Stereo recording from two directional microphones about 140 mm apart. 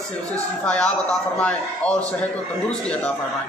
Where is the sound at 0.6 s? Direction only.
5° left (ahead or behind).